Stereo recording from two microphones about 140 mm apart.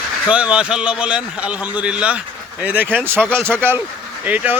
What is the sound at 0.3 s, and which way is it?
Speech, 10° right (ahead or behind).